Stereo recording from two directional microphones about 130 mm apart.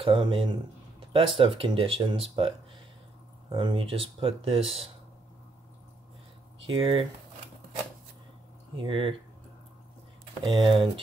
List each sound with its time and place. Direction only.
0.0 s speech: 40° right (ahead or behind)
3.5 s speech: 40° right (ahead or behind)
6.7 s speech: 40° right (ahead or behind)
8.7 s speech: 40° right (ahead or behind)
10.4 s speech: 40° right (ahead or behind)